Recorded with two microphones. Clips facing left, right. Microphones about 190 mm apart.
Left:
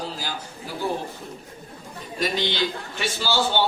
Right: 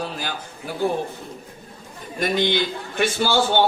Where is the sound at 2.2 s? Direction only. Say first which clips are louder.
Right 4 dB; 55° right (ahead or behind).